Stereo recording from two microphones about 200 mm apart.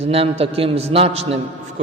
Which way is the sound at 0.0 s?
30° right (ahead or behind).